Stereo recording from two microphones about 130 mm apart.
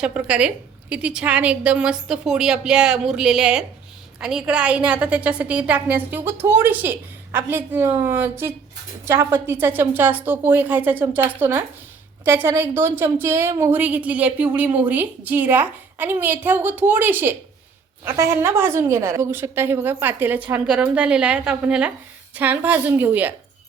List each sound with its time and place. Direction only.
0.0 s a woman's voice: 10° right (ahead or behind)